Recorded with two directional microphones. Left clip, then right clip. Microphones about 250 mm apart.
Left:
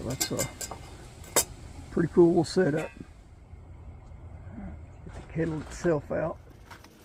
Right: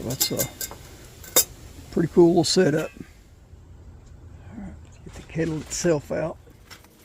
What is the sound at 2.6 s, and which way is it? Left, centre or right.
Speech, right.